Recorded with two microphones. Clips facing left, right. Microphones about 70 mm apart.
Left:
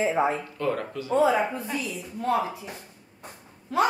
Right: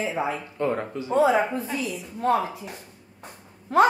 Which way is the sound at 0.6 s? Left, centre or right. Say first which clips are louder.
Right 4 dB; right.